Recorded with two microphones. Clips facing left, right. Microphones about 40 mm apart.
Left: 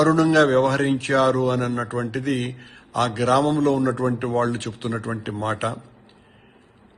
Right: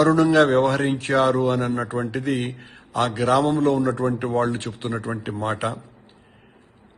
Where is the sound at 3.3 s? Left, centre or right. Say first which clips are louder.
Even; left.